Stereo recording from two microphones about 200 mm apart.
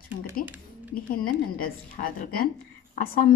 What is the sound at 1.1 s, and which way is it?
Speech, 45° left (ahead or behind).